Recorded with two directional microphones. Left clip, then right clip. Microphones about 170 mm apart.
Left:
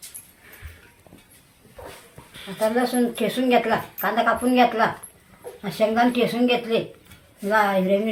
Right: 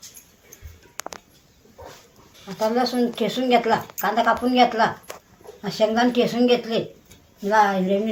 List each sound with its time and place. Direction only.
2.4 s speech: 5° right (ahead or behind); by 6.7 s 20° right (ahead or behind)
7.4 s speech: 5° right (ahead or behind)